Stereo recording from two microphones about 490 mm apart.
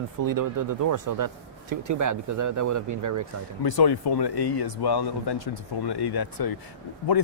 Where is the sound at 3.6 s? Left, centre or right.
Left.